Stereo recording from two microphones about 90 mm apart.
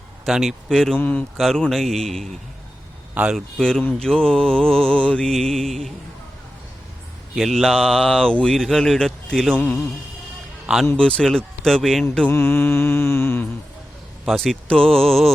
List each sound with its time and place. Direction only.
0.3 s speech: centre (ahead or behind)
0.9 s mantra: 20° left (ahead or behind)
1.4 s speech: 5° left (ahead or behind)
3.3 s speech: 5° left (ahead or behind)
4.0 s mantra: 5° left (ahead or behind)
7.3 s speech: centre (ahead or behind)
9.6 s mantra: 10° left (ahead or behind)
10.9 s mantra: 10° left (ahead or behind)
12.3 s mantra: 25° left (ahead or behind)
14.3 s speech: centre (ahead or behind)